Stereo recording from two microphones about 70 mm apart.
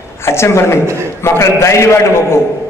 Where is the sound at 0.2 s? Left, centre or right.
Left.